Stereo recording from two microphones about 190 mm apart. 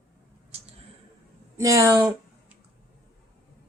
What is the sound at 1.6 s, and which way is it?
Speech, 15° right (ahead or behind).